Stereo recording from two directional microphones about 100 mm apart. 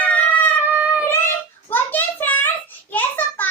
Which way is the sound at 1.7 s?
20° left (ahead or behind).